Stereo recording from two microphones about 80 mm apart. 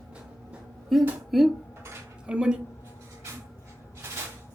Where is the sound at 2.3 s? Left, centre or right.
Centre.